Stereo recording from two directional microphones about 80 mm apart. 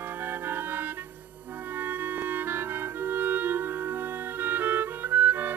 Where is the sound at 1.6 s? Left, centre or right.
Right.